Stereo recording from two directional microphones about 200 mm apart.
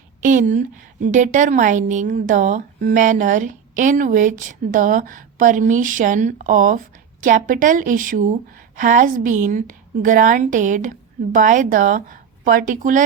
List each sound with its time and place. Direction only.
0.2 s a woman's voice: 40° right (ahead or behind)